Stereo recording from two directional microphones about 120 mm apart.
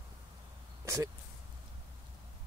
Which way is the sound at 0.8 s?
25° right (ahead or behind).